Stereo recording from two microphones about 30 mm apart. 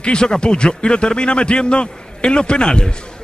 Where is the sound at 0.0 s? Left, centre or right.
Left.